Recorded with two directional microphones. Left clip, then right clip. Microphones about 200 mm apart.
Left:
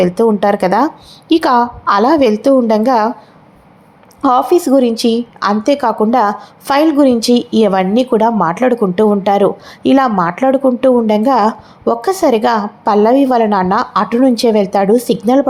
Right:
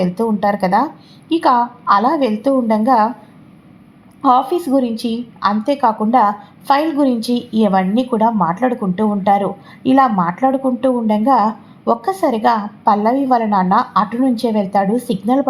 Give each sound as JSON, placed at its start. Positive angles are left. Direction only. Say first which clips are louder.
{"t": 0.2, "sound": "a woman's voice", "louder": "left 2 dB", "side_deg": 25}
{"t": 4.2, "sound": "a woman's voice", "louder": "left 3 dB", "side_deg": 25}